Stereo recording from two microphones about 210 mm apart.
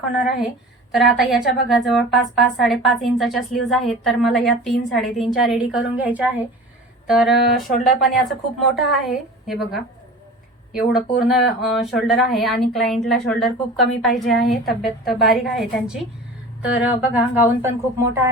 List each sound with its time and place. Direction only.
0.9 s a woman's voice: centre (ahead or behind)
10.9 s a woman's voice: centre (ahead or behind)